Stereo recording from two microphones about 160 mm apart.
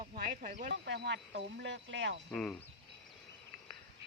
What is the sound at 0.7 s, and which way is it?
Speech, 90° right.